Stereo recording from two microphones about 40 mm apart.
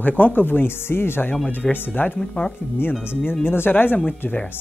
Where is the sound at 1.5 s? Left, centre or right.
Left.